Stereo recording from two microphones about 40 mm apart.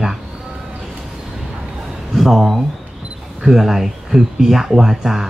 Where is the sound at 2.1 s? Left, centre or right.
Centre.